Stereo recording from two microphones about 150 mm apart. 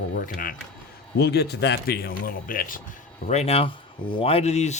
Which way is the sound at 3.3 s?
45° left (ahead or behind).